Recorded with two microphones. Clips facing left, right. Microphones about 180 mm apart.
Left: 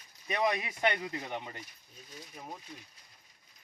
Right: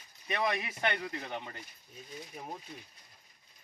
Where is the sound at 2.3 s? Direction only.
5° right (ahead or behind).